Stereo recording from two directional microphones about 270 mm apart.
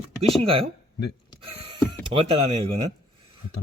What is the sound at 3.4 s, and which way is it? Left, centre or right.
Speech, left.